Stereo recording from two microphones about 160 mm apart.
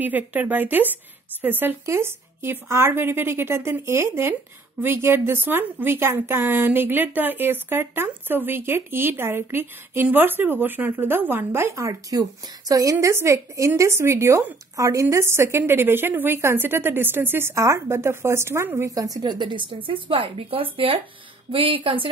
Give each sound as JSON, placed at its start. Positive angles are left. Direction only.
{"t": 0.0, "sound": "speech", "side_deg": -10}